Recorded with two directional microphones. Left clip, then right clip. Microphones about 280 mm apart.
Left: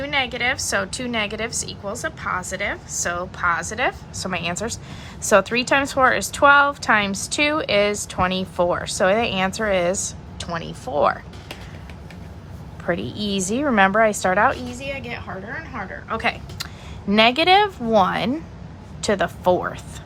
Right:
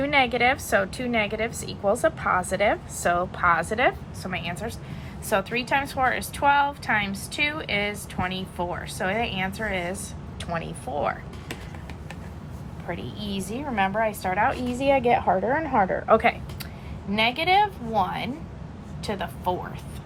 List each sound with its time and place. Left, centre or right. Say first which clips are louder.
0.0 s a woman's voice: right 1 dB; centre
4.2 s a woman's voice: left 9 dB; centre
12.9 s a woman's voice: left 9 dB; centre
14.8 s a woman's voice: right 10 dB; centre
17.2 s a woman's voice: left 6 dB; left